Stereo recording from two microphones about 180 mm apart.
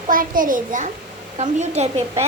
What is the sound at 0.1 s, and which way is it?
A child's voice, 50° right (ahead or behind).